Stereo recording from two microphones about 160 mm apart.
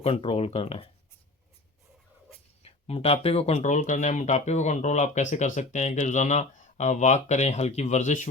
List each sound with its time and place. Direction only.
0.0 s speech: 35° left (ahead or behind)
2.6 s speech: 40° left (ahead or behind)